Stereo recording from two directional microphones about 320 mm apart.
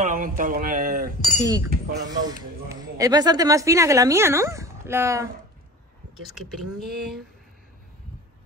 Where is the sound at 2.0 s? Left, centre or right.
Centre.